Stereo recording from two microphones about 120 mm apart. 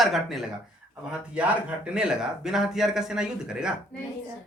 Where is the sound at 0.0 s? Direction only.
Centre (ahead or behind).